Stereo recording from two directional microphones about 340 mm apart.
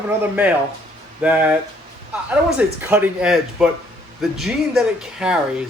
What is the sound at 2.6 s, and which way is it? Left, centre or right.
Speech, centre.